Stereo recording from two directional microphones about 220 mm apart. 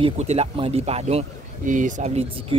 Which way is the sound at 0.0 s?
30° right (ahead or behind).